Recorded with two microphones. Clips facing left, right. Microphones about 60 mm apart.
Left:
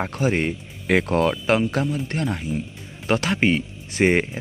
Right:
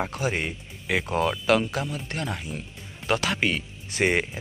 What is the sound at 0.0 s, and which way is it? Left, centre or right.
Speech, left.